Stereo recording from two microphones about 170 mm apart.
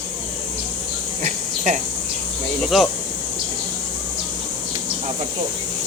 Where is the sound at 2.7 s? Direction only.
Centre (ahead or behind).